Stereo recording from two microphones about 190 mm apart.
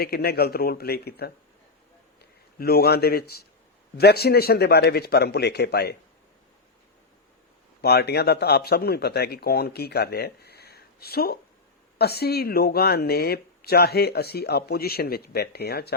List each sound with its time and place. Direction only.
0.0 s speech: 55° left (ahead or behind)
2.6 s speech: 55° left (ahead or behind)
7.8 s speech: 55° left (ahead or behind)